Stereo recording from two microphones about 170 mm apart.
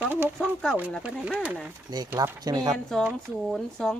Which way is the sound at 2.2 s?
20° right (ahead or behind).